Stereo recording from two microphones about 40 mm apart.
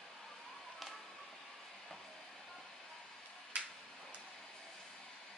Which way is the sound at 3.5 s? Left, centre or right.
Right.